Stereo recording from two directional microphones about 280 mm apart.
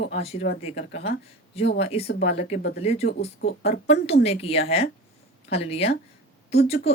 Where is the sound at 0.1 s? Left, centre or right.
Left.